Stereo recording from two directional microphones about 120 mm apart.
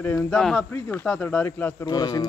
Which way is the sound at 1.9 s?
35° left (ahead or behind).